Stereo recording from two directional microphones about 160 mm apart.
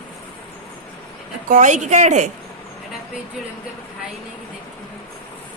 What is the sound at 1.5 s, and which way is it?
Speech, 50° right (ahead or behind).